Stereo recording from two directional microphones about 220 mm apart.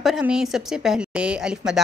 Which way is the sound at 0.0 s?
Centre (ahead or behind).